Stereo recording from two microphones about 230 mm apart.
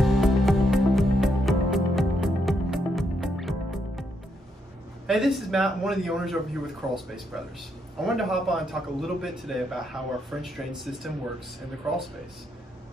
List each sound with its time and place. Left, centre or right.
0.0 s music: centre
5.0 s a man's voice: centre